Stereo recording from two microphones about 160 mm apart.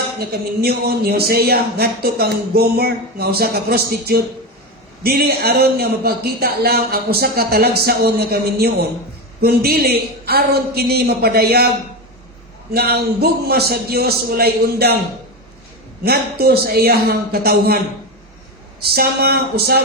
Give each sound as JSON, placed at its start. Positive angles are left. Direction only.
{"t": 0.2, "sound": "speech", "side_deg": -75}
{"t": 12.7, "sound": "speech", "side_deg": -80}
{"t": 16.0, "sound": "speech", "side_deg": -75}
{"t": 18.8, "sound": "speech", "side_deg": -80}